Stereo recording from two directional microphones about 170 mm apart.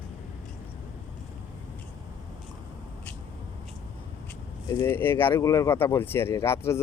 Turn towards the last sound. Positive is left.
turn(degrees=15)  # may be behind; listen again after turning